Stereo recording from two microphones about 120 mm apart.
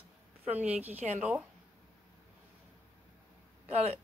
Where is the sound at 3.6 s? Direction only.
60° right (ahead or behind).